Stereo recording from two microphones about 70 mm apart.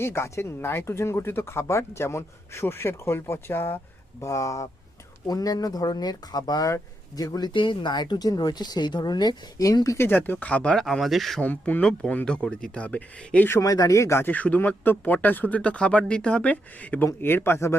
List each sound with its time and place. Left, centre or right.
0.0 s speech: left
4.2 s speech: left
10.0 s speech: left
10.8 s speech: centre
11.4 s speech: left
11.8 s speech: centre
13.6 s speech: left
14.3 s speech: left